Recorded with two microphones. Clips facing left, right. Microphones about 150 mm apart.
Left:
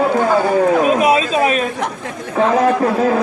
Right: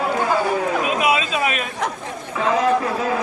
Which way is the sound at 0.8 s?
40° left (ahead or behind).